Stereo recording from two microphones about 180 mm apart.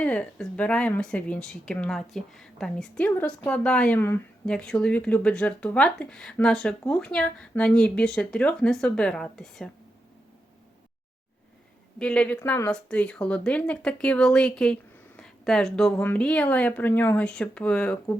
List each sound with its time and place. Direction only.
0.0 s speech: 5° left (ahead or behind)
11.9 s speech: 5° left (ahead or behind)
12.7 s speech: 5° left (ahead or behind)